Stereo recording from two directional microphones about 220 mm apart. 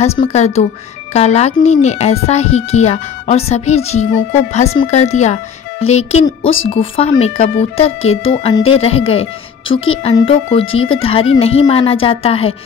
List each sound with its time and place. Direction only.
0.0 s speech: 30° left (ahead or behind)
10.6 s speech: 65° left (ahead or behind)
10.9 s speech: 25° left (ahead or behind)